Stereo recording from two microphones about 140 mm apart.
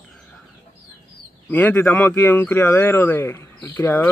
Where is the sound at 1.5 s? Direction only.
10° left (ahead or behind).